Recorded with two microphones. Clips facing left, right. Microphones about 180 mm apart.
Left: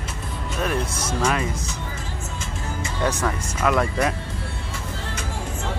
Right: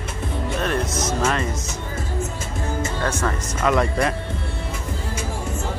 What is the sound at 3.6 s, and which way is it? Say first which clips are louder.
Speech: right 1 dB; centre (ahead or behind).